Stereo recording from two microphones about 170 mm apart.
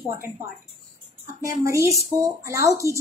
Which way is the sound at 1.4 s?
20° right (ahead or behind).